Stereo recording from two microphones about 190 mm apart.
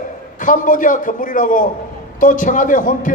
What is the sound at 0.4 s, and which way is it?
A man's voice, 45° left (ahead or behind).